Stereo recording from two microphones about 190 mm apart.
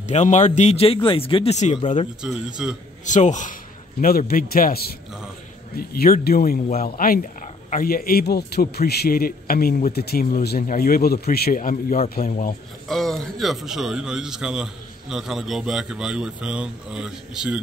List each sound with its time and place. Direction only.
0.0 s a man's voice: 40° left (ahead or behind)
2.2 s a man's voice: 5° right (ahead or behind)
3.1 s a man's voice: 40° left (ahead or behind)
12.8 s a man's voice: centre (ahead or behind)